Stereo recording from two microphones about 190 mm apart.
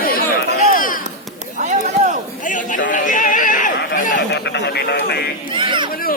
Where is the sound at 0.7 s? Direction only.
45° left (ahead or behind).